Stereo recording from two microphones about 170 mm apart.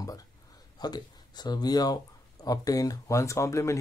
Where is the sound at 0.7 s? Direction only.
25° left (ahead or behind).